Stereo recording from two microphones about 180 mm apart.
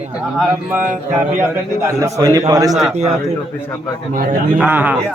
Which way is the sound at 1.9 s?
15° right (ahead or behind).